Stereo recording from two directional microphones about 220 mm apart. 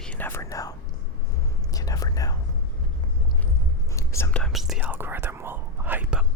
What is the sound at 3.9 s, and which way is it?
Whispering, 15° left (ahead or behind).